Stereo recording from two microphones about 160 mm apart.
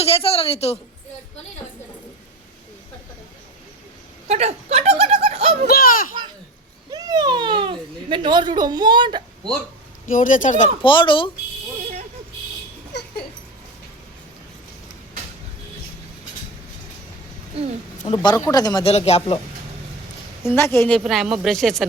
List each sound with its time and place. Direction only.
0.0 s speech: 35° left (ahead or behind)
4.3 s speech: 45° right (ahead or behind)
5.7 s a child's voice: 60° left (ahead or behind)
6.9 s a child's voice: 25° right (ahead or behind)
10.1 s speech: 55° left (ahead or behind)
10.8 s speech: 30° left (ahead or behind)
12.9 s a sound: 90° left
18.0 s a man's voice: 30° left (ahead or behind)
20.6 s a woman's voice: 15° left (ahead or behind)
21.0 s speech: centre (ahead or behind)